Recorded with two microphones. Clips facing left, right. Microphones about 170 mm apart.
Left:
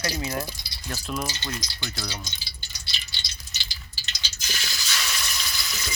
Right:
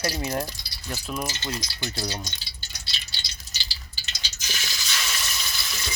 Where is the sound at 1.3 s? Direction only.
25° right (ahead or behind).